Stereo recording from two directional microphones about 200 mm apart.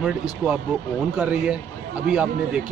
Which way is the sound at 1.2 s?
5° right (ahead or behind).